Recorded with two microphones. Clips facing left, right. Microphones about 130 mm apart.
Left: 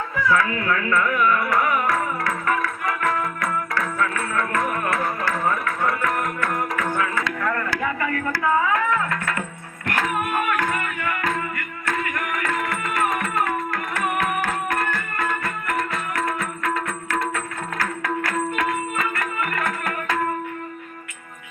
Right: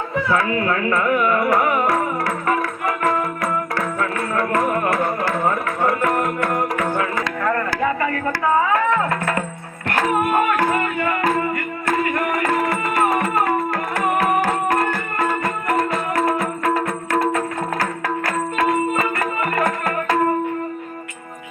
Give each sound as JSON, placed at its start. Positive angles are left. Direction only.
{"t": 0.2, "sound": "music", "side_deg": -30}